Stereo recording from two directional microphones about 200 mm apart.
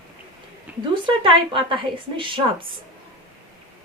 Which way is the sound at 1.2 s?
25° right (ahead or behind).